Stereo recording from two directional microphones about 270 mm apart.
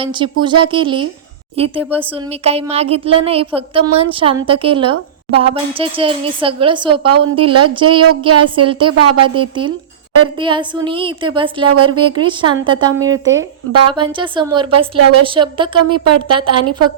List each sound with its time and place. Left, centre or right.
0.0 s a woman's voice: centre
7.4 s speech: right
7.7 s a woman's voice: centre